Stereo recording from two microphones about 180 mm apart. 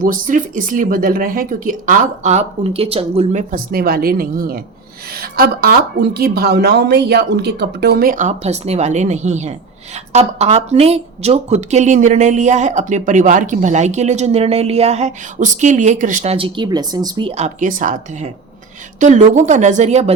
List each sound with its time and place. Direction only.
0.0 s speech: 50° right (ahead or behind)
3.5 s a woman's voice: 55° right (ahead or behind); by 20.1 s 40° right (ahead or behind)